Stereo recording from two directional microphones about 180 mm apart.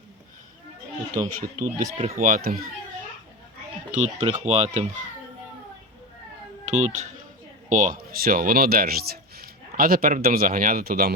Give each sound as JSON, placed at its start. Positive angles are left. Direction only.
{"t": 1.1, "sound": "speech", "side_deg": -20}
{"t": 2.1, "sound": "speech", "side_deg": -50}
{"t": 3.9, "sound": "speech", "side_deg": -40}
{"t": 6.7, "sound": "speech", "side_deg": -40}